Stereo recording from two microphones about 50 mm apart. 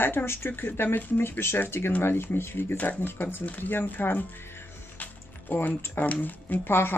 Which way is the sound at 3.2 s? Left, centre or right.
Left.